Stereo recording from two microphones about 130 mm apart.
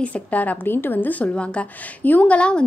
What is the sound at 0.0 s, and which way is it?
A woman's voice, 10° left (ahead or behind).